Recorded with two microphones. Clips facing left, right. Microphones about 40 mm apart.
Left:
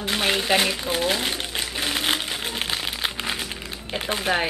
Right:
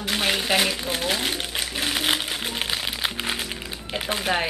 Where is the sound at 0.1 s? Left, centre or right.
Centre.